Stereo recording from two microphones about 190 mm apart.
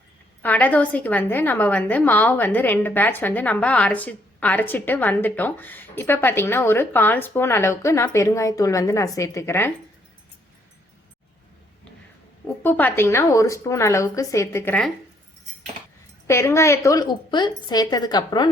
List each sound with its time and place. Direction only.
0.4 s a woman's voice: 10° left (ahead or behind)
12.6 s a woman's voice: 10° left (ahead or behind)
16.2 s a woman's voice: 15° left (ahead or behind)